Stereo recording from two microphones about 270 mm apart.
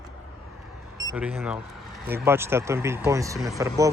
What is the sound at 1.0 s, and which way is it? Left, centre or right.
Speech, centre.